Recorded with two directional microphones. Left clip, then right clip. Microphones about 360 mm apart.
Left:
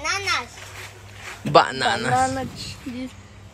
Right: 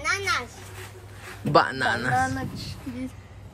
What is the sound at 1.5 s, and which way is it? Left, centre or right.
Speech, centre.